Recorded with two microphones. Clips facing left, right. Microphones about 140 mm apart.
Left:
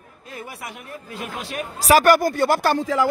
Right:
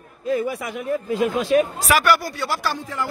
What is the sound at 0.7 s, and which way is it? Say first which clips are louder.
Speech: right 12 dB; 90° right.